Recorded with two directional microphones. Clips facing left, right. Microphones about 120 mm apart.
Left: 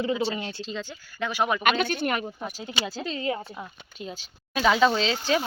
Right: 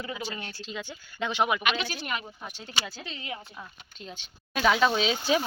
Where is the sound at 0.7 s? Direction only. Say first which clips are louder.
Left 3 dB; 15° right (ahead or behind).